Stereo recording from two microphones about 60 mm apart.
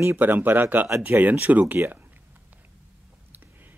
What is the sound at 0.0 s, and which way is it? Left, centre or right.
Speech, right.